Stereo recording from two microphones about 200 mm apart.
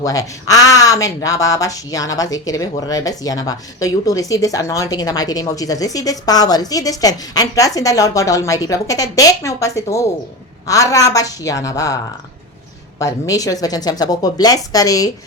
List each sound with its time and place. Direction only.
0.0 s speech: 15° left (ahead or behind)
13.0 s speech: 15° left (ahead or behind)